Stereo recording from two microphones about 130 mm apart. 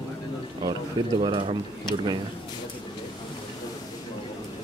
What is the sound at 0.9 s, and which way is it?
Speech, 40° right (ahead or behind).